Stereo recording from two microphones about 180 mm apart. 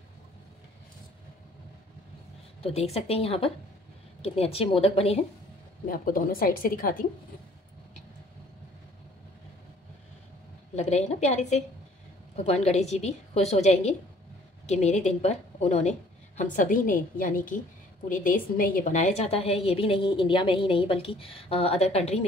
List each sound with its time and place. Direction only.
2.6 s a woman's voice: 35° left (ahead or behind)
5.9 s a woman's voice: 50° left (ahead or behind)
10.8 s a woman's voice: 40° left (ahead or behind)